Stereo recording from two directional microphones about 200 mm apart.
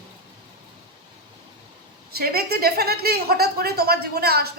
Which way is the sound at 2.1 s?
50° right (ahead or behind).